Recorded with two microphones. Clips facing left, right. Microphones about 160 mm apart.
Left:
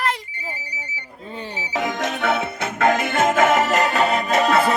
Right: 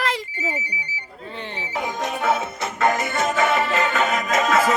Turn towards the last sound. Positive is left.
turn(degrees=35)  # may be behind; listen again after turning